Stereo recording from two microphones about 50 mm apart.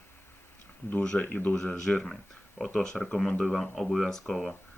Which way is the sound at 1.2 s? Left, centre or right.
Left.